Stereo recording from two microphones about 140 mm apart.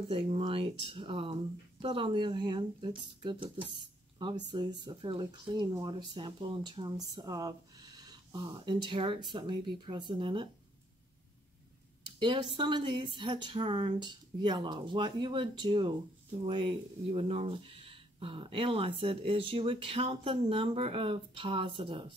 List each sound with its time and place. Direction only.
0.1 s speech: 40° right (ahead or behind)
12.2 s speech: 30° right (ahead or behind)